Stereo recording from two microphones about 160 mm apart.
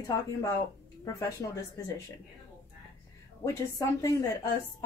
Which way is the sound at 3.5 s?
20° left (ahead or behind).